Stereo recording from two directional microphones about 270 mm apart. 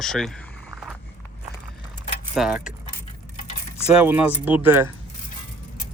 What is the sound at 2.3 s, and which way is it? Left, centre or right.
Speech, centre.